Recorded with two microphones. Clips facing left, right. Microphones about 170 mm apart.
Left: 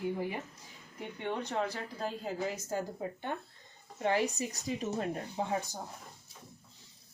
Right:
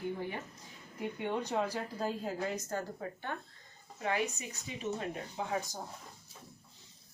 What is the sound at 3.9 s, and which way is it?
Speech, 30° left (ahead or behind).